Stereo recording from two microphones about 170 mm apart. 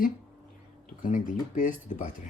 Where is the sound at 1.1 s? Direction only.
45° left (ahead or behind).